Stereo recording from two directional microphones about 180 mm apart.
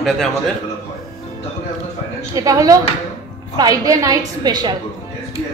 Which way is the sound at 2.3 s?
20° right (ahead or behind).